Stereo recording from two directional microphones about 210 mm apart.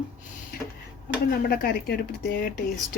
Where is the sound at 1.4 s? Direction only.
45° left (ahead or behind).